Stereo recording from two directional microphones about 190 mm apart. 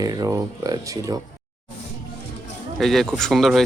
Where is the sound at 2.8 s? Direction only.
Centre (ahead or behind).